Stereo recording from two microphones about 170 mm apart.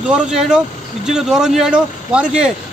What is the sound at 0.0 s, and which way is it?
Speech, 5° right (ahead or behind).